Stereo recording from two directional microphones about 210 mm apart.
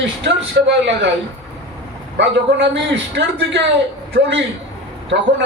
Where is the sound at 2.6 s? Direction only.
60° right (ahead or behind).